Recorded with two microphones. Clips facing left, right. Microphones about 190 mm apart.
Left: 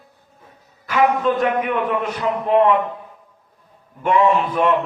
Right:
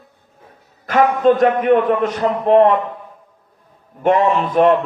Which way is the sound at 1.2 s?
45° right (ahead or behind).